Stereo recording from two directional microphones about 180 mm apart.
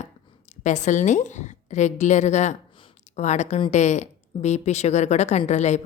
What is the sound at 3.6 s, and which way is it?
A woman's voice, 40° left (ahead or behind).